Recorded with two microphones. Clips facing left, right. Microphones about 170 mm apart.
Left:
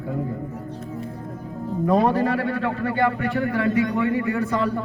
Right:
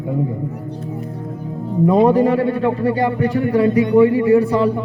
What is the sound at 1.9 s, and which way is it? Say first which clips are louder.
A man's voice: right 6 dB; 20° right (ahead or behind).